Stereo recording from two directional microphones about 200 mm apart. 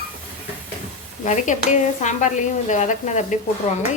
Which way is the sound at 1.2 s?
40° left (ahead or behind).